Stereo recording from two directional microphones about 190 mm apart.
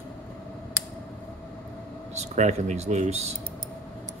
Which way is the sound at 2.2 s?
35° right (ahead or behind).